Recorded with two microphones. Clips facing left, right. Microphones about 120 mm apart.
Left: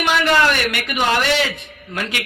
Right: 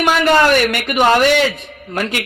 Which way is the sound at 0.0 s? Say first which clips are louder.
Right 4 dB; 45° right (ahead or behind).